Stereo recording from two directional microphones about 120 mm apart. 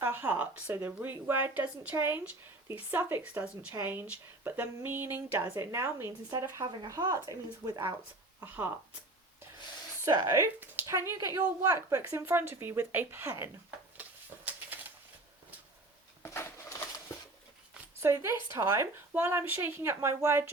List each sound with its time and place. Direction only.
0.0 s a woman's voice: 15° right (ahead or behind)
8.4 s a woman's voice: 15° right (ahead or behind)
10.1 s a woman's voice: 30° right (ahead or behind)
13.9 s a sound: 15° right (ahead or behind)
16.2 s a sound: 20° left (ahead or behind)
18.0 s a woman's voice: 25° right (ahead or behind)